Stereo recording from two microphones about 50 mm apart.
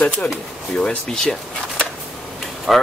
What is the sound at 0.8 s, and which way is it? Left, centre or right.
Speech, centre.